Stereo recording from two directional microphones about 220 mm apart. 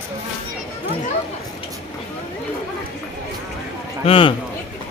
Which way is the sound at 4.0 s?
25° left (ahead or behind).